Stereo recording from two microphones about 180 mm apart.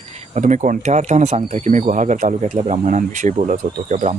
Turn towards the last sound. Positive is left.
turn(degrees=-45)  # may be behind; listen again after turning